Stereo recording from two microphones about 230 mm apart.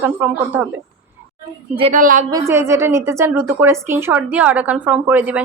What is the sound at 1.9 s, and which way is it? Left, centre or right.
Speech, right.